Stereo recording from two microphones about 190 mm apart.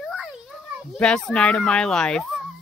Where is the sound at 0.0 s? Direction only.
Centre (ahead or behind).